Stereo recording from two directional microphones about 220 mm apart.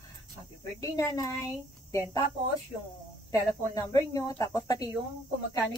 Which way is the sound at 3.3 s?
15° left (ahead or behind).